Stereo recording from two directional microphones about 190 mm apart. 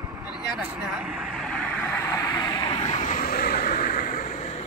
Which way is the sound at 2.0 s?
15° left (ahead or behind).